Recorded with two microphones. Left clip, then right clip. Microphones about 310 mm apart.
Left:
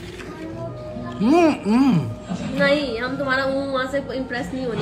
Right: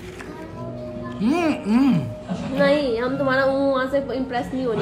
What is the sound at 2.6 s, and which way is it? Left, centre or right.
A woman's voice, right.